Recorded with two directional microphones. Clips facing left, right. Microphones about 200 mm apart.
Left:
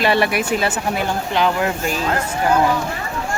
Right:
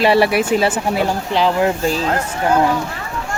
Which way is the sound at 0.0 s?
30° right (ahead or behind).